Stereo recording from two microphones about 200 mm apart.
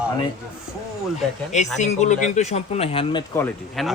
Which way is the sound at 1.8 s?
35° left (ahead or behind).